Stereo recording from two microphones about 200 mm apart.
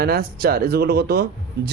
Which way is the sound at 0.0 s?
50° right (ahead or behind).